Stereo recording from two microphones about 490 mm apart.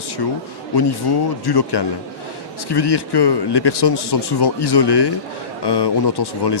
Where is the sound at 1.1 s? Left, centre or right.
Left.